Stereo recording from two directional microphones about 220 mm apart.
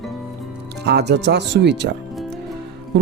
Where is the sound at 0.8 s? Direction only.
50° right (ahead or behind).